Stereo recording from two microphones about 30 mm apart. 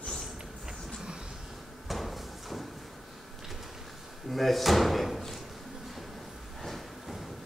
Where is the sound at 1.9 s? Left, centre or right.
Centre.